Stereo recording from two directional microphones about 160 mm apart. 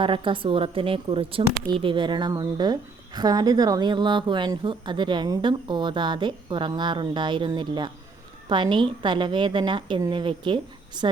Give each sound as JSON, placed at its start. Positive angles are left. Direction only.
{"t": 0.0, "sound": "speech", "side_deg": -30}